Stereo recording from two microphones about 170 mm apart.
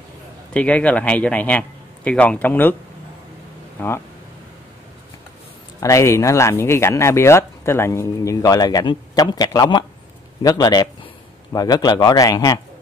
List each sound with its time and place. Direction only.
0.5 s speech: 5° left (ahead or behind)
3.8 s speech: 10° left (ahead or behind)
5.8 s speech: 20° left (ahead or behind)